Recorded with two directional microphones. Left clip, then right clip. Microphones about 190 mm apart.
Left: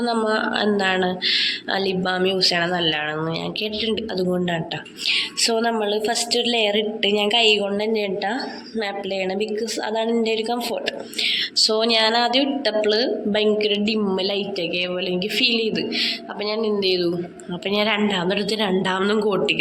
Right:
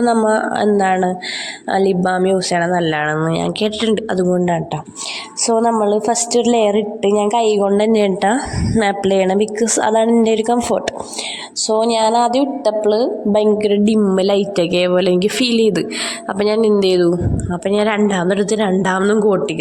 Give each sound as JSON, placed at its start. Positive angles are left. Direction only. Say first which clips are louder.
{"t": 0.0, "sound": "a woman's voice", "louder": "right 7 dB", "side_deg": -40}
{"t": 4.3, "sound": "a woman's voice", "louder": "right 8 dB", "side_deg": -35}
{"t": 5.8, "sound": "a woman's voice", "louder": "right 6 dB", "side_deg": -35}
{"t": 11.8, "sound": "a woman's voice", "louder": "right 8 dB", "side_deg": -30}
{"t": 17.7, "sound": "a woman's voice", "louder": "right 5 dB", "side_deg": -40}